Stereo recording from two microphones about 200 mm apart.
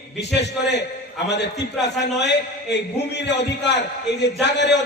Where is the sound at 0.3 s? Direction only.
60° left (ahead or behind).